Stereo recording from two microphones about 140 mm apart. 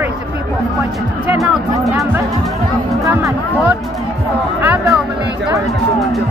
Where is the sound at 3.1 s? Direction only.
20° right (ahead or behind).